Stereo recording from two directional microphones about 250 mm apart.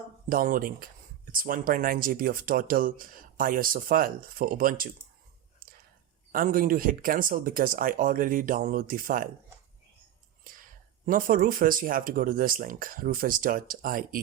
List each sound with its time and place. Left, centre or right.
0.3 s speech: right
6.3 s speech: right
10.5 s whispering: right
11.0 s speech: right